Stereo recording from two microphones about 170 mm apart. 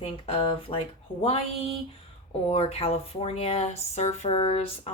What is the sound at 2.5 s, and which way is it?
A woman's voice, 35° left (ahead or behind).